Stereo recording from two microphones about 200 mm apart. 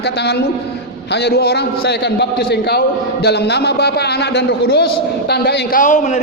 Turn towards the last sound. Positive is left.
turn(degrees=35)  # may be behind; listen again after turning